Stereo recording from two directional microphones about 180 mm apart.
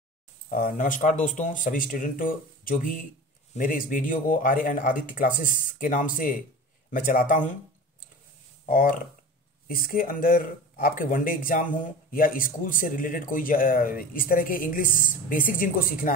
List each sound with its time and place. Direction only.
0.5 s speech: 50° left (ahead or behind)
8.6 s speech: 50° left (ahead or behind)